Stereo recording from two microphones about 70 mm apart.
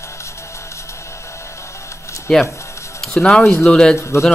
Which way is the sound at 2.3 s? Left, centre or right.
Centre.